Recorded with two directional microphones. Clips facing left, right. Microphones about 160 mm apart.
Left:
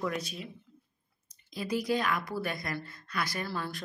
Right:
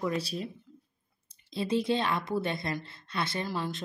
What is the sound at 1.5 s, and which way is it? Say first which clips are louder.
Speech: right 3 dB; 25° right (ahead or behind).